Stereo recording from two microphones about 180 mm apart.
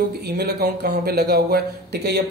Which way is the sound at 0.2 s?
65° right (ahead or behind).